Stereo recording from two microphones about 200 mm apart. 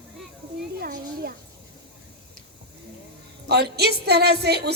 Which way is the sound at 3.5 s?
55° right (ahead or behind).